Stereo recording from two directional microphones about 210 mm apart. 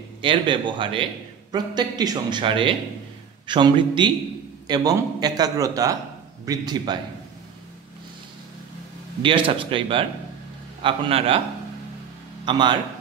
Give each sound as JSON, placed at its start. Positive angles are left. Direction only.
{"t": 0.2, "sound": "a man's voice", "side_deg": -25}
{"t": 9.2, "sound": "a man's voice", "side_deg": -25}
{"t": 12.4, "sound": "a man's voice", "side_deg": -20}